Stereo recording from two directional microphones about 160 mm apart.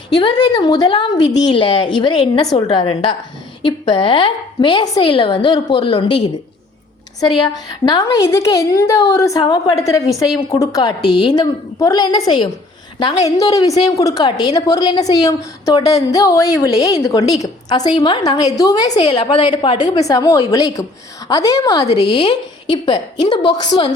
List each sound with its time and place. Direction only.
0.2 s a woman's voice: 25° left (ahead or behind)
7.2 s a woman's voice: 25° left (ahead or behind)